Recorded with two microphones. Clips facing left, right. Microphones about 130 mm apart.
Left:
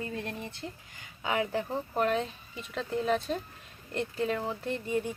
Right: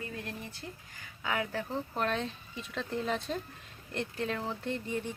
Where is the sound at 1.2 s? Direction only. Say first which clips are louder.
Left 4 dB; 20° left (ahead or behind).